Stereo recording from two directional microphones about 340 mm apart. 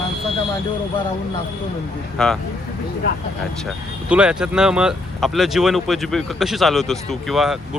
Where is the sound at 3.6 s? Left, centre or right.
Centre.